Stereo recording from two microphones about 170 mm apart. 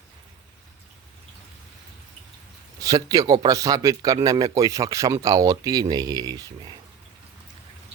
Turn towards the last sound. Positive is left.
turn(degrees=-20)  # may be behind; listen again after turning